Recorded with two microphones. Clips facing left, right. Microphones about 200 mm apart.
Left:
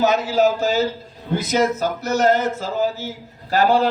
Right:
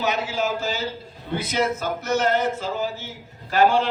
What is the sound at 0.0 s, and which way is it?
A man's voice, 40° left (ahead or behind).